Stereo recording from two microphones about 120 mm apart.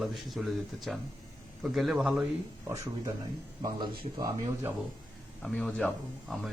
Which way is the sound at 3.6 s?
35° right (ahead or behind).